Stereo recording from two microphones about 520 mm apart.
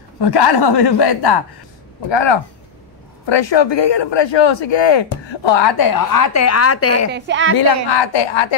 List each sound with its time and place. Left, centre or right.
0.2 s a man's voice: left
7.1 s a woman's voice: centre
7.5 s a man's voice: left